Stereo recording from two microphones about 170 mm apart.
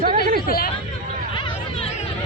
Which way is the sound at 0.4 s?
60° left (ahead or behind).